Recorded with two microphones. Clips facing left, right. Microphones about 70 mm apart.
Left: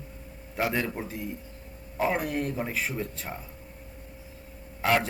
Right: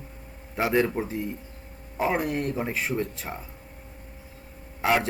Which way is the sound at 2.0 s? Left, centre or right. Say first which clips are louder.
Right 2 dB; centre.